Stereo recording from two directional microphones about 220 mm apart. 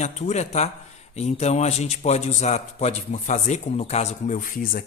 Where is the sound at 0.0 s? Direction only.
30° left (ahead or behind).